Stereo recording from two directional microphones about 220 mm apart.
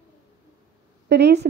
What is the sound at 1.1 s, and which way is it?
Speech, 50° right (ahead or behind).